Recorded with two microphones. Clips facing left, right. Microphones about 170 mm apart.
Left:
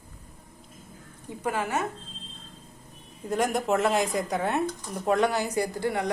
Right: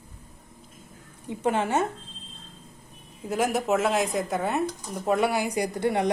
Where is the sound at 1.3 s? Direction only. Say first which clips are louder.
Right 4 dB; 25° right (ahead or behind).